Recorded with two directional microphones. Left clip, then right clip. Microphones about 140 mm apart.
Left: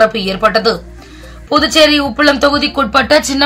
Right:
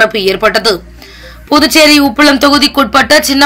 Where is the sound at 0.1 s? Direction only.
50° right (ahead or behind).